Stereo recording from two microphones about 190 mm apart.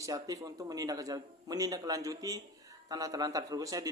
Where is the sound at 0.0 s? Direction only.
20° right (ahead or behind).